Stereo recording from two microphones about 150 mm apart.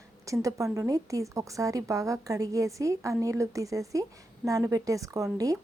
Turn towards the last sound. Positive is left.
turn(degrees=-20)  # may be behind; listen again after turning